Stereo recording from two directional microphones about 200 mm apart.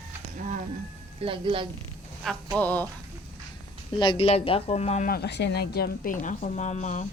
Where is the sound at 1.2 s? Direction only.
25° right (ahead or behind).